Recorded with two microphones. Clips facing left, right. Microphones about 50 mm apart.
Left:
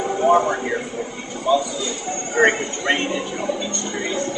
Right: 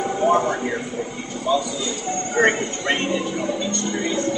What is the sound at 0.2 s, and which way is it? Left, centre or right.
A man's voice, centre.